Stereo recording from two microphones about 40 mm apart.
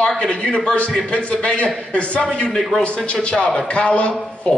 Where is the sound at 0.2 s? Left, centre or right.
Left.